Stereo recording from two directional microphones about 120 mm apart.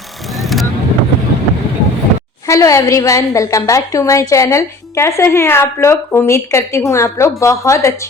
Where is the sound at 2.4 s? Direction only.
25° left (ahead or behind).